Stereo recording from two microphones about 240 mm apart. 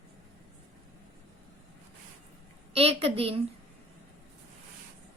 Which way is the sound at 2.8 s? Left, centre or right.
Right.